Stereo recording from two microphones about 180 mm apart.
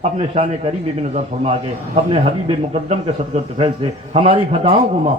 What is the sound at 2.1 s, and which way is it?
A man's voice, 35° right (ahead or behind).